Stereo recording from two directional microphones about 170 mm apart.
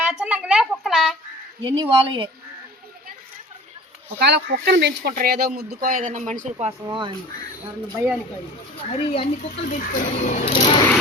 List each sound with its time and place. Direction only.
0.1 s a sound: 5° right (ahead or behind)
1.6 s speech: 25° right (ahead or behind)
4.2 s speech: 85° right
5.1 s speech: 60° right (ahead or behind); by 6.7 s 45° right (ahead or behind)
6.8 s speech: 25° right (ahead or behind)
8.9 s speech: 40° left (ahead or behind)